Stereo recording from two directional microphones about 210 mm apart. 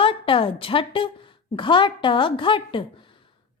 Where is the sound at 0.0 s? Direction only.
25° left (ahead or behind).